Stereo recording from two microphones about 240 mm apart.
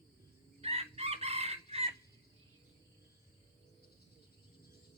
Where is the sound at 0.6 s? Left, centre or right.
Right.